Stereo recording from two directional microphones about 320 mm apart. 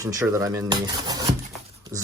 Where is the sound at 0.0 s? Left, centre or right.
Centre.